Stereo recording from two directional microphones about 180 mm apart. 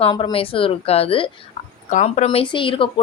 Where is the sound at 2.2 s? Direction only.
25° left (ahead or behind).